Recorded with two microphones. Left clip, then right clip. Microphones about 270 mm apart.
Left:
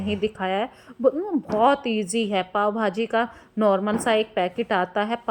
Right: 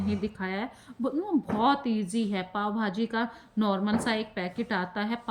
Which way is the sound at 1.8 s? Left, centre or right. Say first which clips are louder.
Left 6 dB; centre.